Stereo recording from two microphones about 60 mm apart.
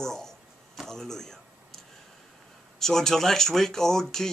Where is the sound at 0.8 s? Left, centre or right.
Centre.